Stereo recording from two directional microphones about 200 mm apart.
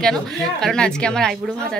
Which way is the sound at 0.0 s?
Centre (ahead or behind).